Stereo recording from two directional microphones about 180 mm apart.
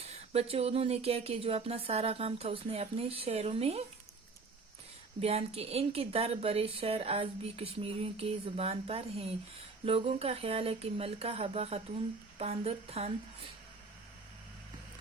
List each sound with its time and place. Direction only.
0.0 s speech: 35° right (ahead or behind)
5.2 s speech: 35° right (ahead or behind)